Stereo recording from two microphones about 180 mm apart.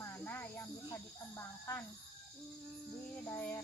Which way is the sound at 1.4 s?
15° left (ahead or behind).